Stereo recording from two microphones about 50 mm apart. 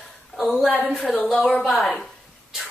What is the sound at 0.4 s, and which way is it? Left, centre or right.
Speech, centre.